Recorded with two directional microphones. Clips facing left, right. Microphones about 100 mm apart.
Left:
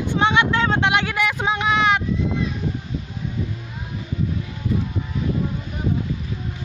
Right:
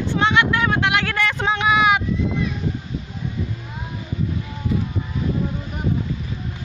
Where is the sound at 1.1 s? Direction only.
10° left (ahead or behind); by 2.0 s 5° right (ahead or behind).